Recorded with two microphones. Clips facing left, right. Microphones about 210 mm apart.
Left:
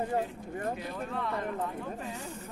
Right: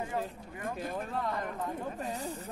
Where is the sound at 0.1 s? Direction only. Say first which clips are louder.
Left 4 dB; 50° left (ahead or behind).